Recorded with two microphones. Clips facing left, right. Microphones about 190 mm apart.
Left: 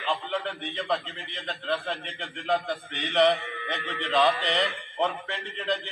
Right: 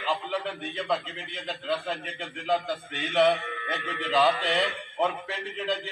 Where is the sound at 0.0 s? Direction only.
Centre (ahead or behind).